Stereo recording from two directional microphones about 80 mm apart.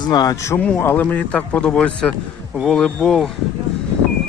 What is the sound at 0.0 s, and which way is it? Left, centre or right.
Speech, left.